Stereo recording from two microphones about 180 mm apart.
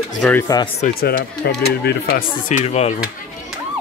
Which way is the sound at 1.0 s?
60° left (ahead or behind).